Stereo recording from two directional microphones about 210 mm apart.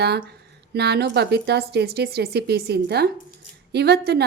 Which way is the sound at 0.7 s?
50° right (ahead or behind).